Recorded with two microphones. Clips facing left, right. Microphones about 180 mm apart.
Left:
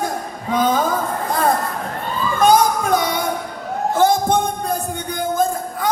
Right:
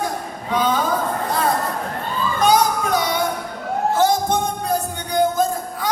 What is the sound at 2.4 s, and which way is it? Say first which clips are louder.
Music: left 3 dB; 50° left (ahead or behind).